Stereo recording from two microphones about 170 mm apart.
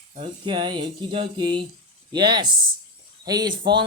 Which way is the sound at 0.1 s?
35° right (ahead or behind).